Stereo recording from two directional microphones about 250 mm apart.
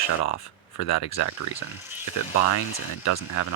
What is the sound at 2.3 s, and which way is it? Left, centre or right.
Speech, left.